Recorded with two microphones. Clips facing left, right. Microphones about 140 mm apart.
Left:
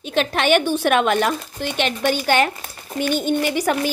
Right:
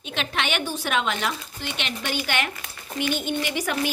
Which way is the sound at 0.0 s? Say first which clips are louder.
Left 8 dB; 45° left (ahead or behind).